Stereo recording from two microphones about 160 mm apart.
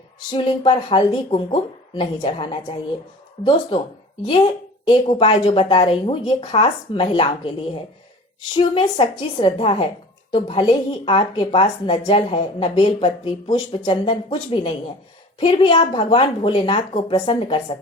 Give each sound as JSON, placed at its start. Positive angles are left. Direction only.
{"t": 0.3, "sound": "a woman's voice", "side_deg": 30}
{"t": 4.3, "sound": "a woman's voice", "side_deg": 30}
{"t": 8.5, "sound": "a woman's voice", "side_deg": 30}